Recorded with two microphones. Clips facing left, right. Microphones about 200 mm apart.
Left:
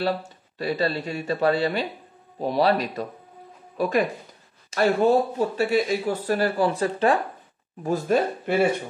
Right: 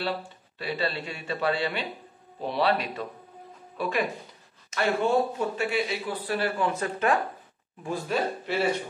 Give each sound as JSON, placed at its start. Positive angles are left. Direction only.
{"t": 0.6, "sound": "speech", "side_deg": 40}
{"t": 7.8, "sound": "speech", "side_deg": 45}